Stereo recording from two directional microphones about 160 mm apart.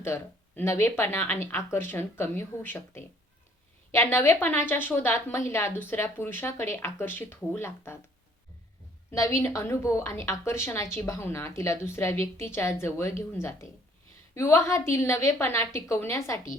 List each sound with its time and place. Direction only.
0.0 s a woman's voice: 15° left (ahead or behind)
9.1 s a woman's voice: 20° left (ahead or behind)